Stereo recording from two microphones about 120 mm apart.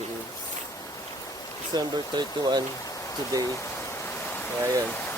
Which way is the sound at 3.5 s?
25° left (ahead or behind).